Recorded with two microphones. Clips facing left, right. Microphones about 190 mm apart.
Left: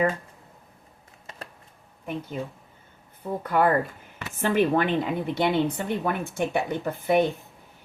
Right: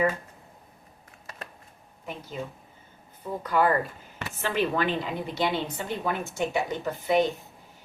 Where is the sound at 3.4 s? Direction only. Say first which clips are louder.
Left 2 dB; 55° left (ahead or behind).